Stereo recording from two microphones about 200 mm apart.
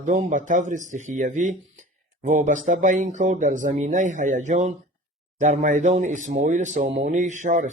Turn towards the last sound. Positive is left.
turn(degrees=-35)  # may be behind; listen again after turning